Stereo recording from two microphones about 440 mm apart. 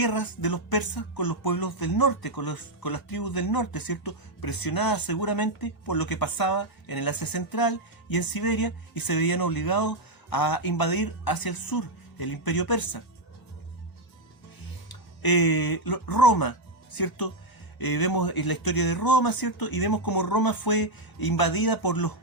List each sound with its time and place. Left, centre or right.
0.0 s speech: left
15.2 s speech: left